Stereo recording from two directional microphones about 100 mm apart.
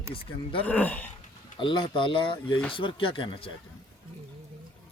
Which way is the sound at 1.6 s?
55° left (ahead or behind).